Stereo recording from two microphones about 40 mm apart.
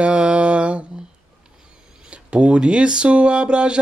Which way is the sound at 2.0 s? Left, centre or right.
Right.